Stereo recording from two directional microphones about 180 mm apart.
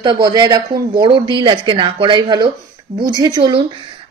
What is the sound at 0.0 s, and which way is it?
Speech, 25° right (ahead or behind).